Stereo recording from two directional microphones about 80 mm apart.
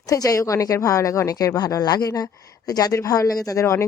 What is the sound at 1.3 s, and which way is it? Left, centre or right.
A woman's voice, left.